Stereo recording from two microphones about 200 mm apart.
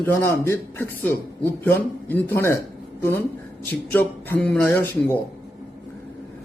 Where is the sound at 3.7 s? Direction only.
10° left (ahead or behind).